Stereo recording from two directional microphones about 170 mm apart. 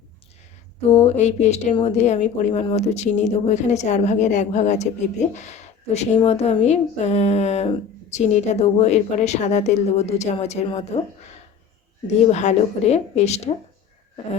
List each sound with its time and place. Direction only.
0.9 s speech: 40° left (ahead or behind)
12.0 s speech: 40° left (ahead or behind)